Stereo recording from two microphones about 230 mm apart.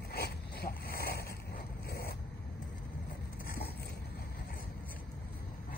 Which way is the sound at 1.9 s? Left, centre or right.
Left.